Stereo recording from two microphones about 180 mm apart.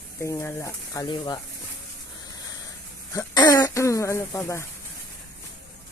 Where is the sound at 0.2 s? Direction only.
15° left (ahead or behind).